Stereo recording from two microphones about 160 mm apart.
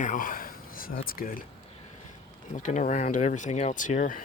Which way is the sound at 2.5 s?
55° left (ahead or behind).